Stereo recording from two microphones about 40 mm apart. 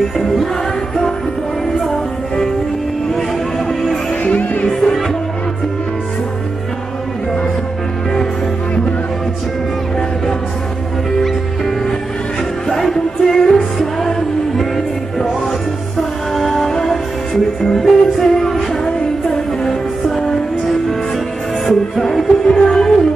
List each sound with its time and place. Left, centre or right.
0.2 s music: centre
1.9 s music: centre
4.2 s music: left
12.6 s music: centre
16.0 s music: centre
18.9 s music: centre
22.3 s music: centre